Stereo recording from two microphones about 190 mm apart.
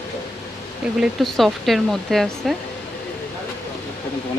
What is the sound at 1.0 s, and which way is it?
Speech, centre (ahead or behind).